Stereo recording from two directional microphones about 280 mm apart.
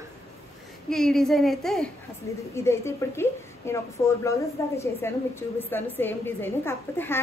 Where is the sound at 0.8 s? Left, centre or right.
Centre.